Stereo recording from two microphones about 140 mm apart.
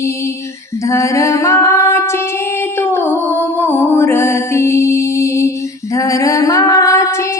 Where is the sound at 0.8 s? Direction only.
20° left (ahead or behind).